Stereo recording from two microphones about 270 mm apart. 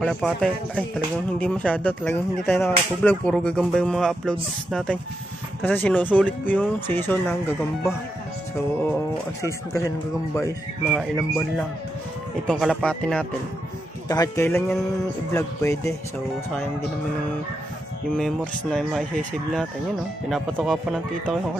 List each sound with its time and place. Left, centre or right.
0.0 s speech: centre
9.8 s speech: centre
10.9 s speech: centre
12.4 s speech: centre
18.1 s speech: centre
20.2 s speech: centre